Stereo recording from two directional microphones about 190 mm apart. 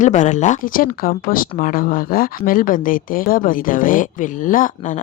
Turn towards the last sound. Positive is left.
turn(degrees=45)  # may be behind; listen again after turning